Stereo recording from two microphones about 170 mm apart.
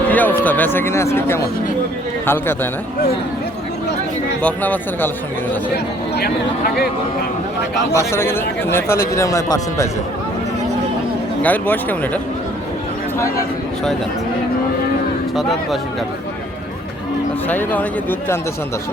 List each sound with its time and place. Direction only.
0.1 s a man's voice: 10° left (ahead or behind)
4.4 s a man's voice: 10° left (ahead or behind)
7.9 s a man's voice: 15° left (ahead or behind)
11.4 s a man's voice: 10° left (ahead or behind)
17.5 s a man's voice: 10° left (ahead or behind)